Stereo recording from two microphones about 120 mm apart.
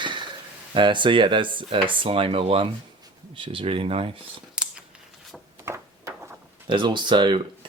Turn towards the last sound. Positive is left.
turn(degrees=-40)  # may be behind; listen again after turning